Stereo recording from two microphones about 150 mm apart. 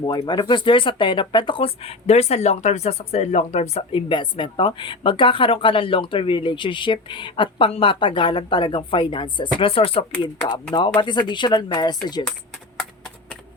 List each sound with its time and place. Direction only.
0.0 s speech: 30° left (ahead or behind); by 4.0 s 45° left (ahead or behind)
4.1 s speech: 35° left (ahead or behind)
10.1 s speech: 5° left (ahead or behind)
10.8 s speech: 35° left (ahead or behind)